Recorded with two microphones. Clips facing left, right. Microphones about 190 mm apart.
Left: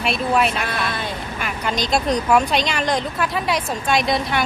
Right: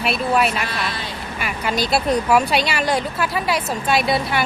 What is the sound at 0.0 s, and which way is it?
Speech, centre (ahead or behind).